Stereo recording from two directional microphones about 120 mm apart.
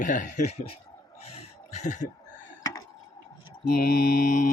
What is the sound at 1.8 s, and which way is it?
Mantra, 90° left.